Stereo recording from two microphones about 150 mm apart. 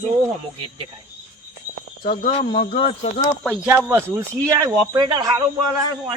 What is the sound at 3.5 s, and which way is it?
Speech, 10° right (ahead or behind).